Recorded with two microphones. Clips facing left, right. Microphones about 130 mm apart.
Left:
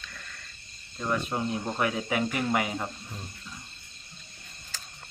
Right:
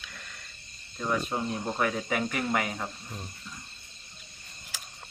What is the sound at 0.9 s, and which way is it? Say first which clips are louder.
Speech: even; centre (ahead or behind).